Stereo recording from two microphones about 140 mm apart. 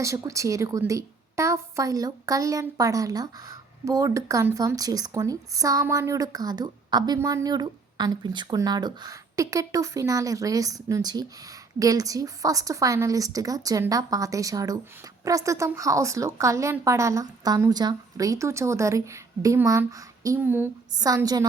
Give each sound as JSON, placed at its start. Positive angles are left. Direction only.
{"t": 0.0, "sound": "a woman's voice", "side_deg": -20}
{"t": 20.9, "sound": "a woman's voice", "side_deg": -25}